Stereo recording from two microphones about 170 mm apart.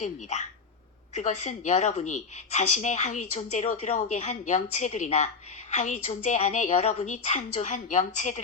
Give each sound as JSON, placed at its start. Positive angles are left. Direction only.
{"t": 0.0, "sound": "a woman's voice", "side_deg": 40}